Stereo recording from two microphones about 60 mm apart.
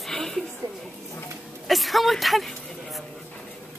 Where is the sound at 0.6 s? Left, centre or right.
Right.